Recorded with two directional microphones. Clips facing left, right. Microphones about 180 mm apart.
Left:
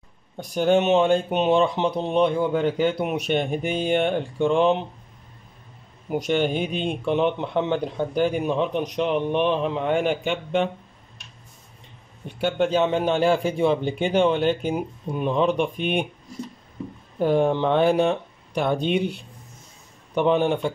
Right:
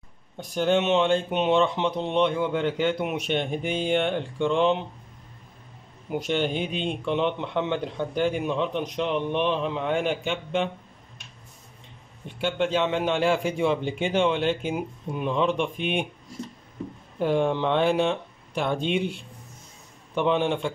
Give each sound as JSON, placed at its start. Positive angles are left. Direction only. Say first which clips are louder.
{"t": 0.4, "sound": "speech", "louder": "left 3 dB", "side_deg": 40}
{"t": 6.0, "sound": "a man's voice", "louder": "left 3 dB", "side_deg": 45}
{"t": 12.4, "sound": "speech", "louder": "left 3 dB", "side_deg": 40}
{"t": 17.2, "sound": "speech", "louder": "left 3 dB", "side_deg": 40}
{"t": 20.2, "sound": "speech", "louder": "left 3 dB", "side_deg": 40}